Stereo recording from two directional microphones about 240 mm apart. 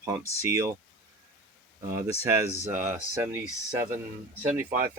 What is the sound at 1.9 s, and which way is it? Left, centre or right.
Speech, centre.